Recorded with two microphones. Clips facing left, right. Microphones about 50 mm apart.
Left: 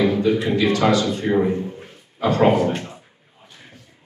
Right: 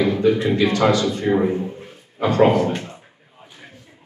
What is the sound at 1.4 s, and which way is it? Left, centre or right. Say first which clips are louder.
A man's voice: right 1 dB; right.